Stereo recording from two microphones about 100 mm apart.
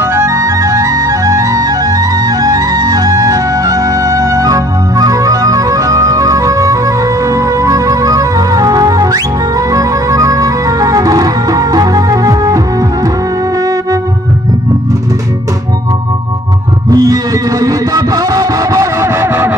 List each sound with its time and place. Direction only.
0.0 s music: 25° right (ahead or behind)
16.9 s music: 35° right (ahead or behind)